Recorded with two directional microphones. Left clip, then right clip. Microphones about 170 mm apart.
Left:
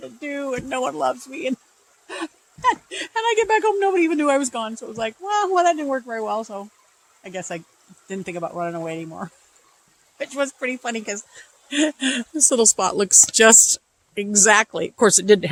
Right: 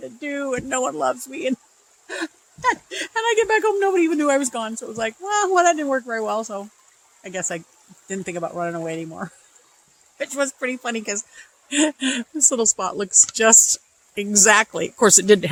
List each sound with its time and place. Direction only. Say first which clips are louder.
0.2 s speech: right 1 dB; 10° right (ahead or behind)
12.3 s speech: left 1 dB; 25° left (ahead or behind)
12.5 s speech: left 4 dB; 50° left (ahead or behind)
14.2 s speech: even; 5° right (ahead or behind)